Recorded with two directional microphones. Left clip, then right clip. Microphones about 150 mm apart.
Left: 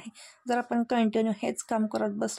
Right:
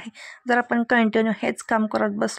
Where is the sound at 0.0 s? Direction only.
15° right (ahead or behind).